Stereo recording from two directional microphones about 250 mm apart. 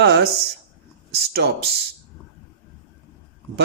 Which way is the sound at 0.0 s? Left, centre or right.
Right.